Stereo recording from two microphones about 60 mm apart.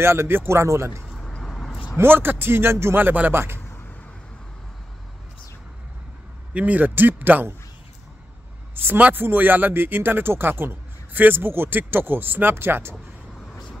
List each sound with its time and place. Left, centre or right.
0.0 s speech: right
1.4 s a sound: centre
2.0 s a man's voice: right
6.5 s a man's voice: right
8.7 s a man's voice: right